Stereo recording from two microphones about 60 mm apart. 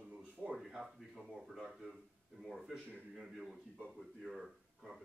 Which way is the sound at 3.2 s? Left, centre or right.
Centre.